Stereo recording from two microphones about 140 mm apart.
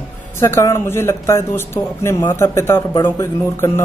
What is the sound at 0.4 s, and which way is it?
A man's voice, 20° left (ahead or behind).